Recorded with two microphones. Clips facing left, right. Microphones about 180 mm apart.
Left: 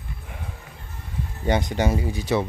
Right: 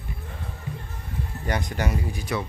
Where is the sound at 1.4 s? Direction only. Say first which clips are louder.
Left 6 dB; 25° left (ahead or behind).